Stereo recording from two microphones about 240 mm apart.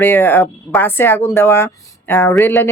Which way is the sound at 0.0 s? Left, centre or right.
Centre.